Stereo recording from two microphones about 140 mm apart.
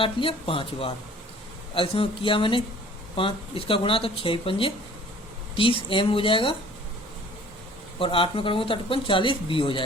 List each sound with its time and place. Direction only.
0.0 s speech: 40° left (ahead or behind)
7.9 s speech: 40° left (ahead or behind)